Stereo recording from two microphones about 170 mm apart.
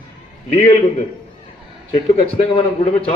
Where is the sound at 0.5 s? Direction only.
40° left (ahead or behind).